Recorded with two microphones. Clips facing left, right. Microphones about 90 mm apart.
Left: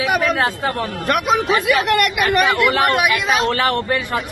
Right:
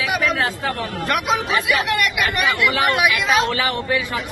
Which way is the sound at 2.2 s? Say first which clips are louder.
Left 4 dB; 40° left (ahead or behind).